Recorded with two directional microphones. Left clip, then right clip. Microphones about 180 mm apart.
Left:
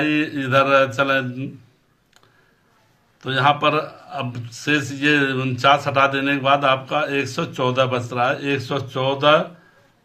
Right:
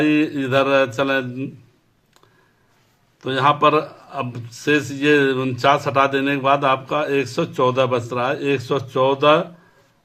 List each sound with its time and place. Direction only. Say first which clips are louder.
0.0 s a man's voice: right 2 dB; 45° right (ahead or behind)
3.2 s a man's voice: right 1 dB; 50° right (ahead or behind)